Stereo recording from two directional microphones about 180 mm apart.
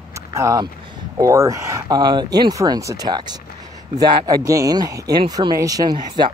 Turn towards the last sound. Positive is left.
turn(degrees=-25)  # may be behind; listen again after turning